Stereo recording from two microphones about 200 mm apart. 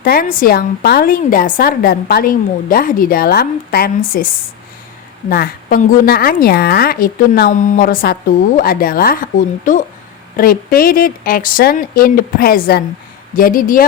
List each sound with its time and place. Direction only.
0.0 s a woman's voice: 45° left (ahead or behind)